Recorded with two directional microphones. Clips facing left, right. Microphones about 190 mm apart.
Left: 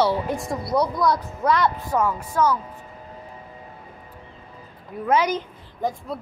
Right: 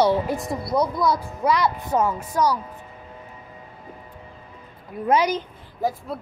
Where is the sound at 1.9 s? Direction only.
20° right (ahead or behind).